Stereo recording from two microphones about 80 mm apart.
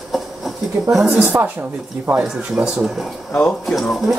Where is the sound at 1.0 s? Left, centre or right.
Centre.